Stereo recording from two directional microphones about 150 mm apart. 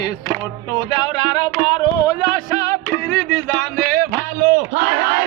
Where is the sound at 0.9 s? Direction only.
25° left (ahead or behind).